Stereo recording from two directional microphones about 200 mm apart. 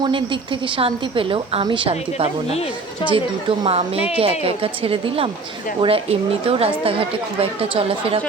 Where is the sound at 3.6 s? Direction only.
30° right (ahead or behind).